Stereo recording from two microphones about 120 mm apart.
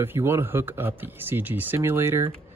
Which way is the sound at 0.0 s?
20° right (ahead or behind).